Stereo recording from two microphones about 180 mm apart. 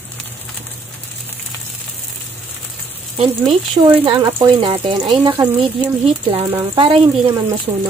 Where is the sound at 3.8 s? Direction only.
25° right (ahead or behind).